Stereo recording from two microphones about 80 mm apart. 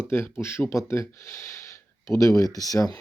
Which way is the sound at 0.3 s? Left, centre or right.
Left.